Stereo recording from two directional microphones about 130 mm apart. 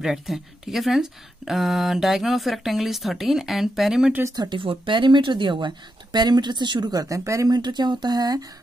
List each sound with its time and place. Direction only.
0.0 s speech: centre (ahead or behind)
4.4 s speech: 40° right (ahead or behind)